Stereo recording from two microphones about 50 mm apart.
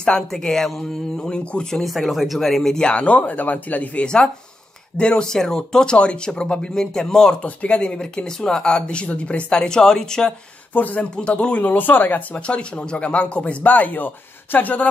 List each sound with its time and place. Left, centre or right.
0.3 s speech: centre
1.8 s speech: centre
2.8 s speech: left
4.0 s speech: centre
7.4 s speech: left
10.7 s speech: left
11.1 s speech: left
11.6 s speech: left
12.4 s speech: left